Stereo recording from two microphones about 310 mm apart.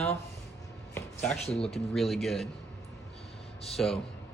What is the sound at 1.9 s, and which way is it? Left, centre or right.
Speech, centre.